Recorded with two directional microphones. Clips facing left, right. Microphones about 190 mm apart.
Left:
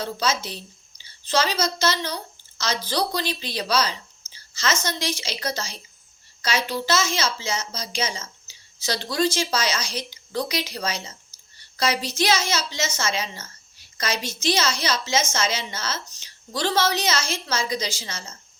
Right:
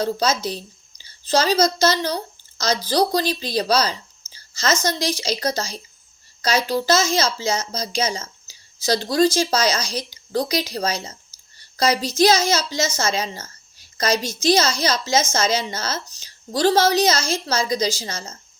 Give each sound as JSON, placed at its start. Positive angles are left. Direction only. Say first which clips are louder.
{"t": 0.0, "sound": "a woman's voice", "louder": "right 5 dB", "side_deg": -40}